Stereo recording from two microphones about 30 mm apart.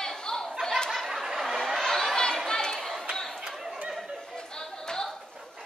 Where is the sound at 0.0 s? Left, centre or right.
Left.